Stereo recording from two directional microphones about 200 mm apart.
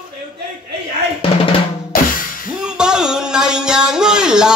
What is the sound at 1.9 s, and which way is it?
Drum kit, 45° left (ahead or behind).